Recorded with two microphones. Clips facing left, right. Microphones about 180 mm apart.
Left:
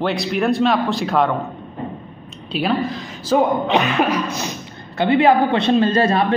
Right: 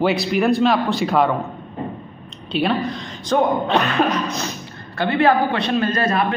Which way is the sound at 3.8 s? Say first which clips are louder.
Left 1 dB; 10° left (ahead or behind).